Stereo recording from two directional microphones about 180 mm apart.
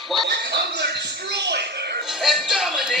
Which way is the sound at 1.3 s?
70° right (ahead or behind).